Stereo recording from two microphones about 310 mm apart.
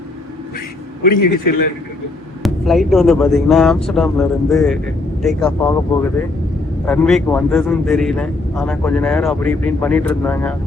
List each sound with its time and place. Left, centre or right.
1.1 s a man's voice: left
2.4 s speech: centre